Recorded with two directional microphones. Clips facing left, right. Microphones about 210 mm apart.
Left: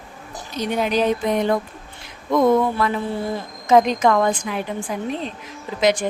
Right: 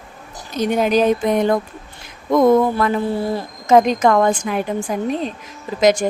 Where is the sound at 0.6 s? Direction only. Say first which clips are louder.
Right 4 dB; 45° right (ahead or behind).